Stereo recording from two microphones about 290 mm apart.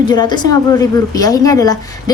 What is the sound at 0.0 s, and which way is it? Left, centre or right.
A woman's voice, centre.